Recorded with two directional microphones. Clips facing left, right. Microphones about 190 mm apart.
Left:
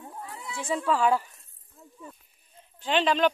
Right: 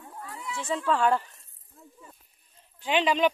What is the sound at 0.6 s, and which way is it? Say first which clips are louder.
Speech: left 1 dB; 10° left (ahead or behind).